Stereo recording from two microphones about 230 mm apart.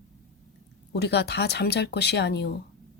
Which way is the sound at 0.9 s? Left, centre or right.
Left.